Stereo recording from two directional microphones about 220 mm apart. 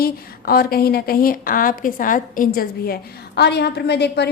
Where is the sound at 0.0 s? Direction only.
45° left (ahead or behind).